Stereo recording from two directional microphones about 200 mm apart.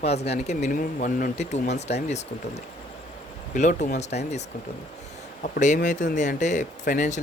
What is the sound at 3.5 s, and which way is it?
Speech, 40° left (ahead or behind).